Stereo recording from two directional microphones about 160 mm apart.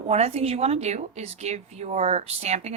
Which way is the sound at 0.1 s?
40° right (ahead or behind).